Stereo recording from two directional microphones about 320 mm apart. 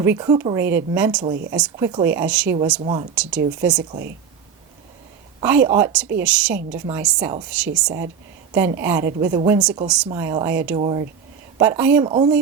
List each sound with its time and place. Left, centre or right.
0.0 s a woman's voice: centre
1.2 s speech: right
1.5 s speech: centre
2.8 s speech: centre
3.2 s a woman's voice: centre
5.4 s a woman's voice: centre
10.8 s speech: centre